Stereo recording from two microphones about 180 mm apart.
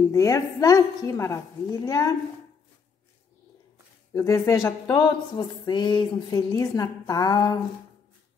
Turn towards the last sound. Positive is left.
turn(degrees=20)  # may be behind; listen again after turning